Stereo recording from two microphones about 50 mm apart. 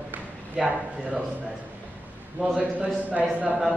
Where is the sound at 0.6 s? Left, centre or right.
Centre.